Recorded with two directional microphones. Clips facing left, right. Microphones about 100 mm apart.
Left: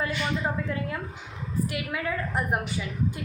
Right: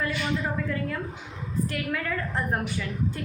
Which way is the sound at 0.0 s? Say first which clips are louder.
Even; 20° left (ahead or behind).